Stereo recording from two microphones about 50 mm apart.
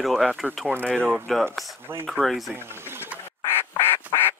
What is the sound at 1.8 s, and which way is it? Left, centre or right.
Speech, right.